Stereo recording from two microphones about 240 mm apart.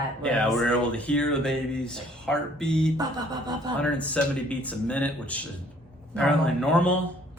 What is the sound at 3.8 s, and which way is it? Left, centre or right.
Speech, centre.